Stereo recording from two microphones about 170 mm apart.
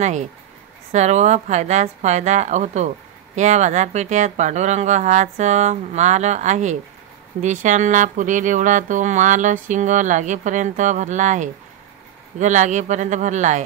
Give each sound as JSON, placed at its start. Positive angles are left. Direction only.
{"t": 0.9, "sound": "speech", "side_deg": -40}